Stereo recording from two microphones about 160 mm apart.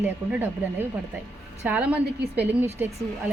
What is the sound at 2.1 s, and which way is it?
Speech, 90° right.